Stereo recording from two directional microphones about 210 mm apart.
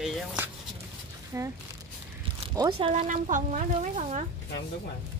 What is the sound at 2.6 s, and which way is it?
Speech, 25° right (ahead or behind).